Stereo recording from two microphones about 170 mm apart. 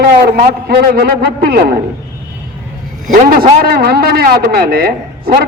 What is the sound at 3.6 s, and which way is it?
Speech, 65° right (ahead or behind).